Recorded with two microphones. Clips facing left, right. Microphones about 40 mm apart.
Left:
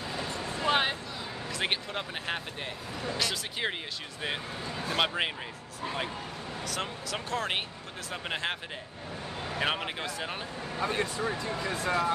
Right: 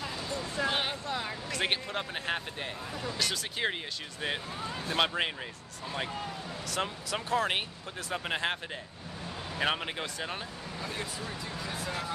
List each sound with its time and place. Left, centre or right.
0.2 s a sound: left
0.7 s a sound: left
1.5 s speech: centre
6.7 s speech: centre
9.6 s speech: centre
10.8 s speech: left